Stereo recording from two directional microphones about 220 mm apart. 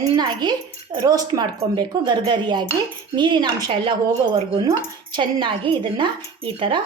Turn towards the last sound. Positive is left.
turn(degrees=-25)  # may be behind; listen again after turning